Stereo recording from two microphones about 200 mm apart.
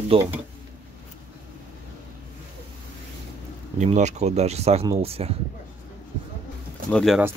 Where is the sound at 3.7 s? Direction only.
35° right (ahead or behind).